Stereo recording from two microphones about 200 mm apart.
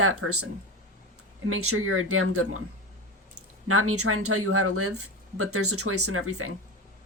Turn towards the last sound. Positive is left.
turn(degrees=-90)